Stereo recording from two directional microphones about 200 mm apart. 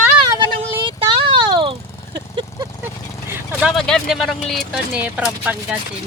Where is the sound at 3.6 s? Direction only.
Centre (ahead or behind).